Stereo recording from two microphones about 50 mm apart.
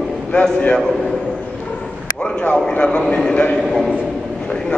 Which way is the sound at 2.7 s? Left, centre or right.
Left.